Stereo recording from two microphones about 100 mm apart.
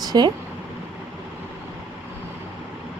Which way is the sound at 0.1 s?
45° right (ahead or behind).